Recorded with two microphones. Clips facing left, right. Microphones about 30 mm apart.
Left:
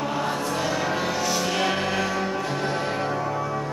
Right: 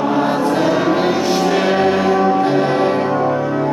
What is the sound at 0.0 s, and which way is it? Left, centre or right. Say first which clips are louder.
Music: right 10 dB; right.